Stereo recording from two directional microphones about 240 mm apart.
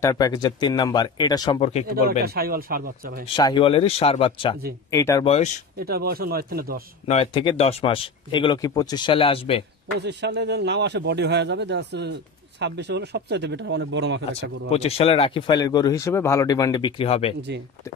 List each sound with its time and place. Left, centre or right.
0.0 s speech: centre
2.0 s speech: right
3.3 s speech: centre
5.3 s speech: left
5.8 s speech: right
7.1 s speech: left
9.9 s a man's voice: right
14.7 s speech: left